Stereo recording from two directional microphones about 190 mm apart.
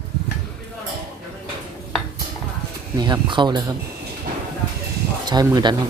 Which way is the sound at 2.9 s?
20° right (ahead or behind).